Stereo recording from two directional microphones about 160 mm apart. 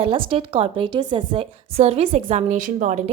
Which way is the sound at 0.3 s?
35° right (ahead or behind).